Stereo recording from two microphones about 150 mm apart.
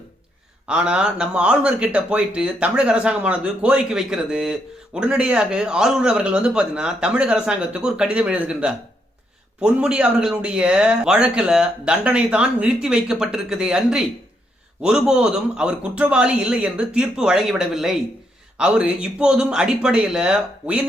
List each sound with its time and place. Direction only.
0.7 s speech: 5° right (ahead or behind)